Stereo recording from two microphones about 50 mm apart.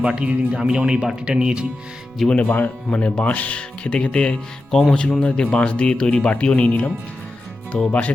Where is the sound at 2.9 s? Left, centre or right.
Left.